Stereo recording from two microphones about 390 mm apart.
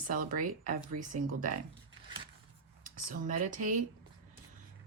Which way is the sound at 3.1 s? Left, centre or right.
Right.